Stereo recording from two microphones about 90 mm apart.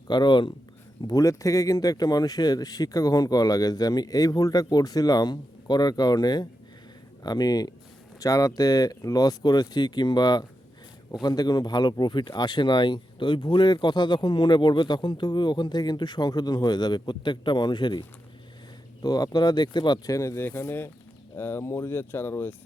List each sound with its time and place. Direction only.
0.1 s speech: 55° left (ahead or behind)
1.0 s speech: 40° left (ahead or behind)
19.0 s speech: 45° left (ahead or behind)
20.1 s speech: 30° left (ahead or behind)